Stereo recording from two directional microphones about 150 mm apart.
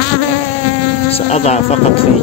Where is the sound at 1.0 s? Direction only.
45° left (ahead or behind).